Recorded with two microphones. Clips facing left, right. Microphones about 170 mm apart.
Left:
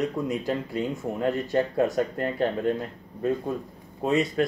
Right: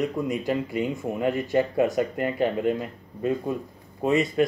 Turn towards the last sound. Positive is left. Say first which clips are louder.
# right 2 dB
turn(degrees=0)  # may be behind; listen again after turning